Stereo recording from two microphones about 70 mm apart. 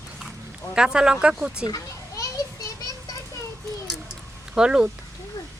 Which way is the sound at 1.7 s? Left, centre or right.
Left.